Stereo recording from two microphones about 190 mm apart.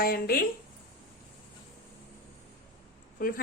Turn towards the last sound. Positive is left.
turn(degrees=50)  # may be behind; listen again after turning